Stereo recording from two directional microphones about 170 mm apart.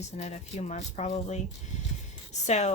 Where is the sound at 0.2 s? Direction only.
40° left (ahead or behind).